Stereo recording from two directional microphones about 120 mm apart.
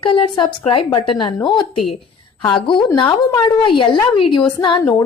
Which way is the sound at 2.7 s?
40° left (ahead or behind).